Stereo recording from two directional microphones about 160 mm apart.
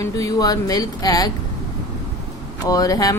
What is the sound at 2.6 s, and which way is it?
Speech, 20° left (ahead or behind).